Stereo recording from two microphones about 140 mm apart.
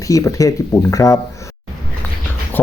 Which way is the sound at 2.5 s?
15° left (ahead or behind).